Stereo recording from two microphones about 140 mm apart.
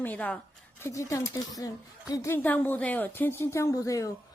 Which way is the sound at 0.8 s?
20° left (ahead or behind).